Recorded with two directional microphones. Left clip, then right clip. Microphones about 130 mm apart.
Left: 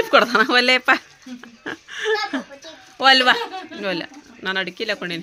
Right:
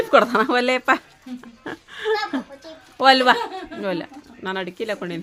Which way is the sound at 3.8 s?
10° right (ahead or behind).